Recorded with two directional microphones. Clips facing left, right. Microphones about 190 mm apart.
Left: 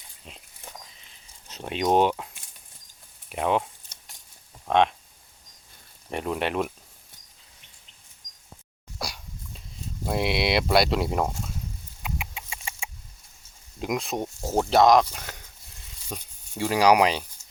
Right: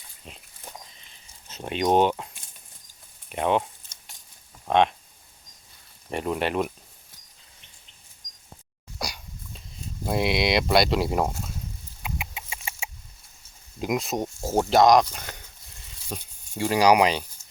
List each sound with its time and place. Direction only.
0.3 s dog: centre (ahead or behind)
1.5 s speech: centre (ahead or behind)
4.7 s speech: centre (ahead or behind)
6.1 s speech: centre (ahead or behind)
9.0 s dog: centre (ahead or behind)
10.1 s speech: centre (ahead or behind)
12.0 s chicken: centre (ahead or behind)
13.7 s speech: centre (ahead or behind)